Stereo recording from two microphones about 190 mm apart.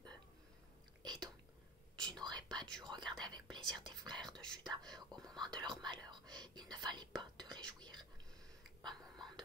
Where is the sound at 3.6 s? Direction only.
Centre (ahead or behind).